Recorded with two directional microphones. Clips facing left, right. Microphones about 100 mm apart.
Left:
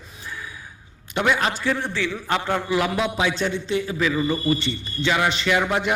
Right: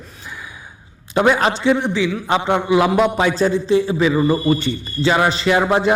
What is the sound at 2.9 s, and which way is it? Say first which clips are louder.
A man's voice: right 7 dB; 50° right (ahead or behind).